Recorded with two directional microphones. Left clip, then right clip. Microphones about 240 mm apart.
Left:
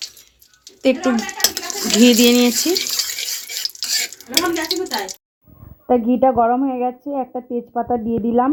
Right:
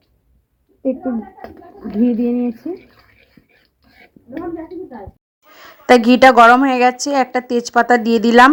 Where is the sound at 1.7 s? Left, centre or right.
Centre.